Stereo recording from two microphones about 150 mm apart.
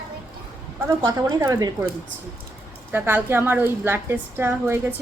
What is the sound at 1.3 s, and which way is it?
Speech, 20° right (ahead or behind).